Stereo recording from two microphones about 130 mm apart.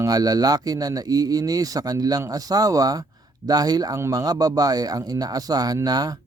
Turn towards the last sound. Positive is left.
turn(degrees=-30)  # may be behind; listen again after turning